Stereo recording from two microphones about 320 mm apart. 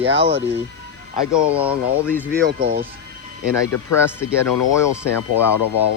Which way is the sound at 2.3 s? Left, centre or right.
Right.